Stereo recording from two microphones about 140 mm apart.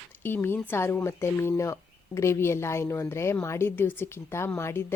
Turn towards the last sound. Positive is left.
turn(degrees=15)  # may be behind; listen again after turning